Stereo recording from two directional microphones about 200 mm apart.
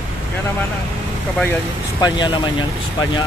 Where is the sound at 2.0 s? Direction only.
20° left (ahead or behind).